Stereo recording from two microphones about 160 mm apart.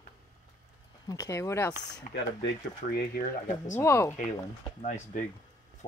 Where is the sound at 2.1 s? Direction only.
55° left (ahead or behind).